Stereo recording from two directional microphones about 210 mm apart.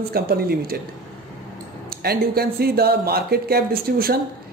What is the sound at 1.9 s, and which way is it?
Speech, 50° right (ahead or behind).